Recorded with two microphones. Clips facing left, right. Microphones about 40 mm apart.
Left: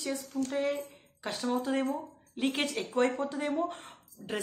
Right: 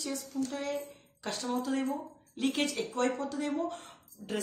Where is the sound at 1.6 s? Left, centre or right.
Left.